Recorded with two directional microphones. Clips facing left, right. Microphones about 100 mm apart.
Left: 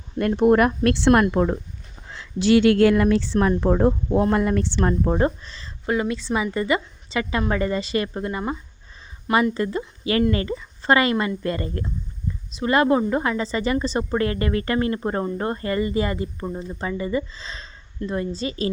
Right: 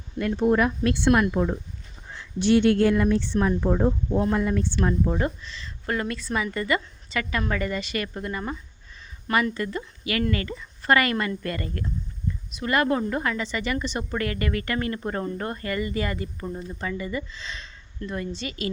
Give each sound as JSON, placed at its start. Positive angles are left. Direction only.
{"t": 0.2, "sound": "speech", "side_deg": 55}
{"t": 2.0, "sound": "speech", "side_deg": 90}
{"t": 3.3, "sound": "speech", "side_deg": 60}
{"t": 4.8, "sound": "a woman's voice", "side_deg": 50}
{"t": 5.1, "sound": "speech", "side_deg": 40}
{"t": 5.8, "sound": "a woman's voice", "side_deg": 15}